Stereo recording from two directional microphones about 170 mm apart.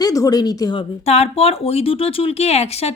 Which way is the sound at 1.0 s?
40° left (ahead or behind).